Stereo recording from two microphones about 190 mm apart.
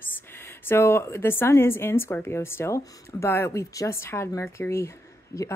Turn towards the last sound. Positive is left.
turn(degrees=15)  # may be behind; listen again after turning